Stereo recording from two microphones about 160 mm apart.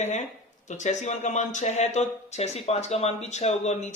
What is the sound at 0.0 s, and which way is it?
Speech, 45° left (ahead or behind).